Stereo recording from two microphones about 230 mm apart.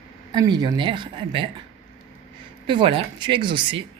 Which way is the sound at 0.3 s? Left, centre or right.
Centre.